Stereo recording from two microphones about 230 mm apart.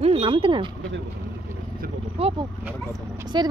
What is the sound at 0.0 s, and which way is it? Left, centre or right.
Speech, right.